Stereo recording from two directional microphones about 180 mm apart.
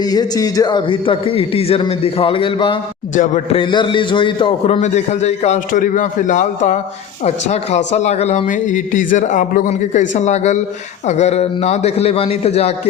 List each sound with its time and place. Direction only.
0.0 s a man's voice: 20° left (ahead or behind)